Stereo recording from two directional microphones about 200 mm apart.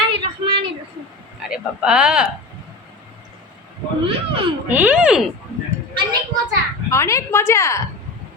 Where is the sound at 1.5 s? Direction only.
5° right (ahead or behind).